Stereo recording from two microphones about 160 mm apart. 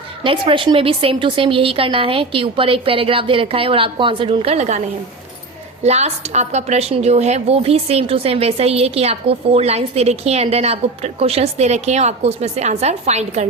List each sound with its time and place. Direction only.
0.2 s a woman's voice: 35° right (ahead or behind)
5.8 s a woman's voice: 45° right (ahead or behind)